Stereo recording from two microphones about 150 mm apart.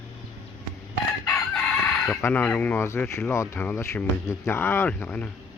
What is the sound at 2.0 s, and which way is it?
Speech, 10° left (ahead or behind).